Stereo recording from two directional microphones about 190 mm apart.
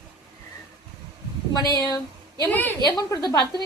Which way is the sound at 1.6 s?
20° left (ahead or behind).